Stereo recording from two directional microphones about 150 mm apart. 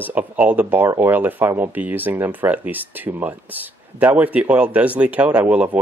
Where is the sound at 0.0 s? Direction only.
10° right (ahead or behind).